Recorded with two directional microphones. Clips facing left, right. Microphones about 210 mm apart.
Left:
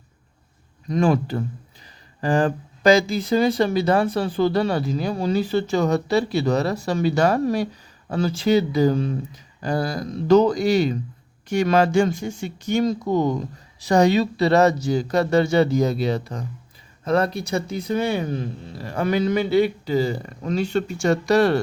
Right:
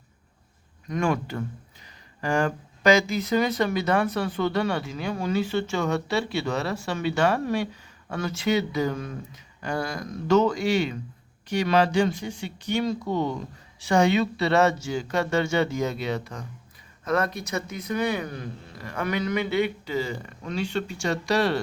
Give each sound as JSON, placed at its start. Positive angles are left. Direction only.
{"t": 0.9, "sound": "speech", "side_deg": 35}